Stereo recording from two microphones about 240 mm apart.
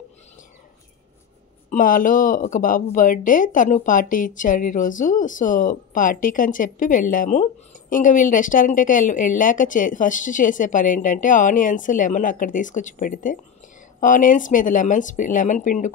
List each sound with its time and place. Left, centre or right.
1.7 s speech: left